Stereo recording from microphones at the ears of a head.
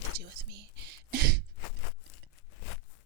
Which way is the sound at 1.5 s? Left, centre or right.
Left.